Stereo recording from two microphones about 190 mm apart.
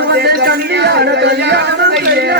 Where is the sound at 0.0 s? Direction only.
60° right (ahead or behind).